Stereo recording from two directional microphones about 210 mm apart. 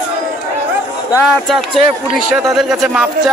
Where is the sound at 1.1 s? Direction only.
Centre (ahead or behind).